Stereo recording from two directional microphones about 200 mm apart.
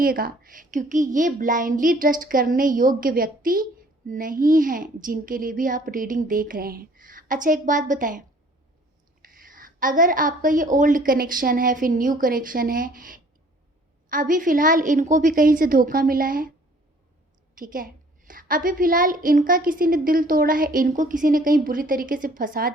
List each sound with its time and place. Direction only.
0.0 s a woman's voice: 45° right (ahead or behind)
9.2 s a woman's voice: 45° right (ahead or behind)
17.5 s a woman's voice: 45° right (ahead or behind)